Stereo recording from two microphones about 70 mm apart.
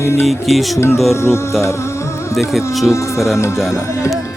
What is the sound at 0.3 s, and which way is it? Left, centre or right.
Speech, centre.